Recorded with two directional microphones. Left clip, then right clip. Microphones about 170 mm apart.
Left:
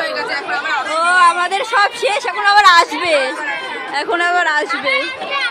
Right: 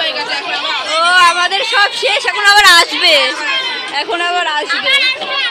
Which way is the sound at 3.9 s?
20° left (ahead or behind).